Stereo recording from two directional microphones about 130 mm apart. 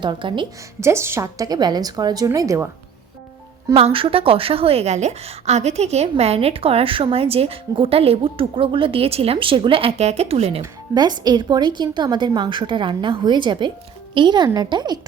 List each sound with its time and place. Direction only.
0.0 s speech: 40° right (ahead or behind)
0.8 s a woman's voice: 20° right (ahead or behind)
3.8 s a woman's voice: 45° right (ahead or behind)
10.6 s speech: 30° right (ahead or behind)